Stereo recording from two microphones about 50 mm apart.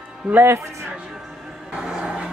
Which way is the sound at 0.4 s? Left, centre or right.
Right.